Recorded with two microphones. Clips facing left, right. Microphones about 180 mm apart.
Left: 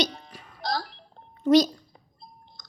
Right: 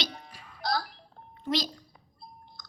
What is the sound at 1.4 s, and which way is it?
Speech, 45° left (ahead or behind).